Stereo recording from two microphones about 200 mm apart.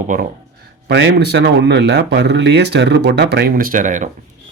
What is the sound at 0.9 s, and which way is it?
Speech, 60° right (ahead or behind).